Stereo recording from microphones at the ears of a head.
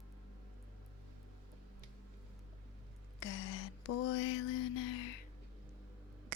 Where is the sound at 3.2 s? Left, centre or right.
Left.